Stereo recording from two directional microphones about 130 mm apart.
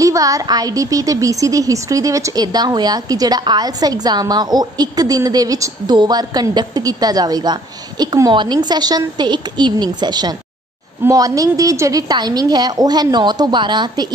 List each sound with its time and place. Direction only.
0.0 s a woman's voice: 25° right (ahead or behind)